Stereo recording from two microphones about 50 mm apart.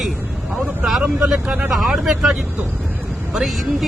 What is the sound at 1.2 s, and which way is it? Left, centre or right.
Speech, centre.